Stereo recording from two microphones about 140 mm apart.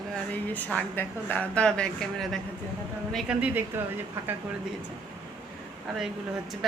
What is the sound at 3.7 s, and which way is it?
Speech, 15° right (ahead or behind).